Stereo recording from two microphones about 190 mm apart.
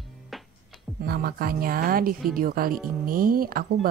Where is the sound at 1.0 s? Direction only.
55° right (ahead or behind).